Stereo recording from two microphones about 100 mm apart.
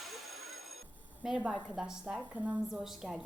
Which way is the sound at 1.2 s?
5° right (ahead or behind).